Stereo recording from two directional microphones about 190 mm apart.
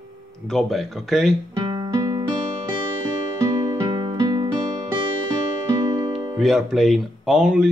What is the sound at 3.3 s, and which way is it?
Music, 20° right (ahead or behind).